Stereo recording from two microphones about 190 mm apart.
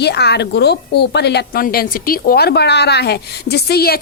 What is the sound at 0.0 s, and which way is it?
A woman's voice, 60° left (ahead or behind).